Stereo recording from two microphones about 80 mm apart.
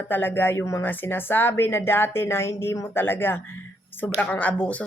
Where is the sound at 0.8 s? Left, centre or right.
Left.